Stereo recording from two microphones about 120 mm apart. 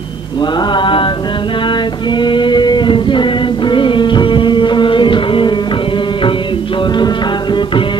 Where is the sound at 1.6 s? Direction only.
40° left (ahead or behind).